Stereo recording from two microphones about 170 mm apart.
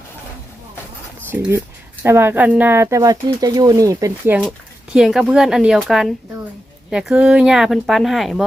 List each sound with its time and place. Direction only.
1.3 s speech: 15° right (ahead or behind)
4.4 s speech: 5° right (ahead or behind)